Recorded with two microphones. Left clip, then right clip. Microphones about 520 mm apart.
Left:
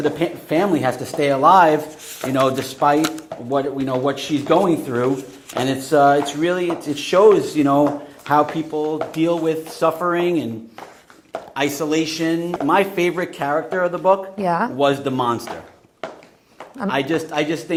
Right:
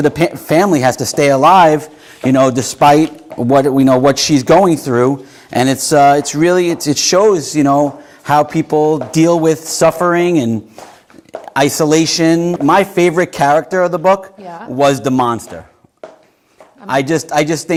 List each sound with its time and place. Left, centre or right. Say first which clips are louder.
0.0 s speech: right 7 dB; right
3.5 s a man's voice: right 11 dB; right
5.6 s speech: right 5 dB; right
11.5 s a man's voice: right 9 dB; right
12.6 s speech: right 6 dB; right
14.4 s speech: left 10 dB; left
14.8 s speech: right 7 dB; right
16.9 s speech: right 8 dB; right